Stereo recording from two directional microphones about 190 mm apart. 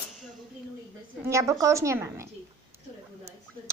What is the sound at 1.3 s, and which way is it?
Speech, 15° right (ahead or behind).